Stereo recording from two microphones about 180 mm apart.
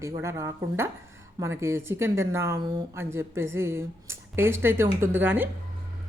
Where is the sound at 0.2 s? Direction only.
15° right (ahead or behind).